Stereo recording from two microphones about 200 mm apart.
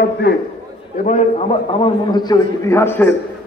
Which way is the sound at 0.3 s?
55° left (ahead or behind).